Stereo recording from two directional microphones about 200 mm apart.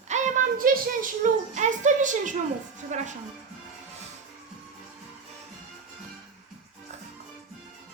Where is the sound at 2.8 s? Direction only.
35° right (ahead or behind).